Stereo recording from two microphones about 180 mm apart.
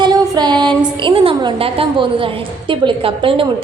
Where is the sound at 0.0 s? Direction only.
25° right (ahead or behind).